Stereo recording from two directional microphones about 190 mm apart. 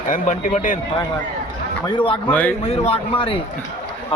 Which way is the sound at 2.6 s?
35° left (ahead or behind).